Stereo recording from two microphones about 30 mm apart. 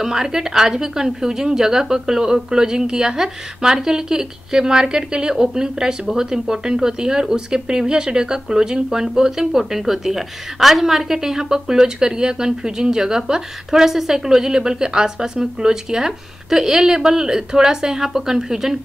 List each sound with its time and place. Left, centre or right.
0.0 s a woman's voice: centre